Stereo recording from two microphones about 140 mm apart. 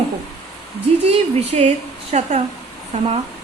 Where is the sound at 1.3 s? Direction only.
45° right (ahead or behind).